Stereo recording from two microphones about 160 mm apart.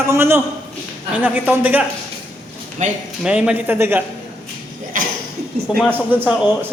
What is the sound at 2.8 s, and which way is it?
Speech, 50° right (ahead or behind).